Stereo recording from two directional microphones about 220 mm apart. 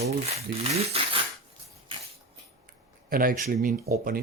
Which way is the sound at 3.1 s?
40° right (ahead or behind).